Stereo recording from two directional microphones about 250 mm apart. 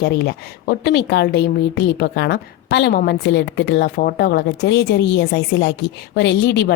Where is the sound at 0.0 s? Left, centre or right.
Left.